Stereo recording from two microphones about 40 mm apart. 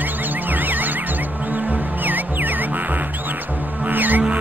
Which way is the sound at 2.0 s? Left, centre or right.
Right.